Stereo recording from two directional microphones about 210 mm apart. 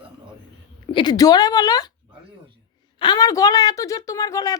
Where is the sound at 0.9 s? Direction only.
20° left (ahead or behind).